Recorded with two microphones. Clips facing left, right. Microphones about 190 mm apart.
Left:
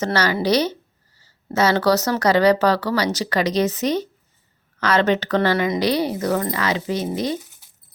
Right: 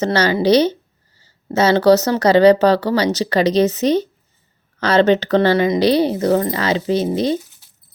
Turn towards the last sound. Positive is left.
turn(degrees=-30)  # may be behind; listen again after turning